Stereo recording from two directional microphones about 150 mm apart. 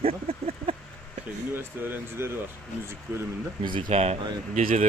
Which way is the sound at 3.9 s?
45° right (ahead or behind).